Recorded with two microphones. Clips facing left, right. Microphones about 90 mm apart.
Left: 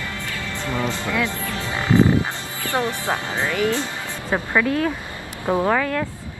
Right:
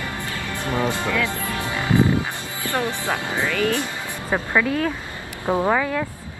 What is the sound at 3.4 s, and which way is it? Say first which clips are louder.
Speech: even; 20° left (ahead or behind).